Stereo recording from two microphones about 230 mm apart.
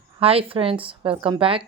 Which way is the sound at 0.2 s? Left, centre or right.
Right.